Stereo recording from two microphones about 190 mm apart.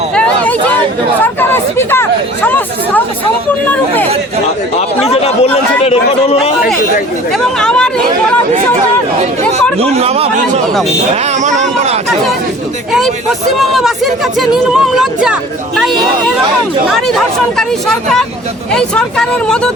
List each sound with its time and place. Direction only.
1.2 s chatter: 10° left (ahead or behind)
4.9 s a man's voice: 30° left (ahead or behind)
7.3 s speech: 5° left (ahead or behind)
9.9 s a man's voice: 35° right (ahead or behind)
13.7 s speech: centre (ahead or behind)
16.9 s speech: centre (ahead or behind)